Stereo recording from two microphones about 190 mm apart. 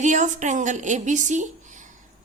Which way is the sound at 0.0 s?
40° right (ahead or behind).